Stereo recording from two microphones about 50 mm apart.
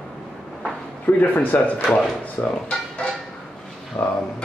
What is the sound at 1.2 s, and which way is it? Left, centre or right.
Speech, left.